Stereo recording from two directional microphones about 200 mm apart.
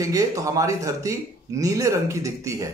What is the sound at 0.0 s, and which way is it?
Speech, 15° right (ahead or behind).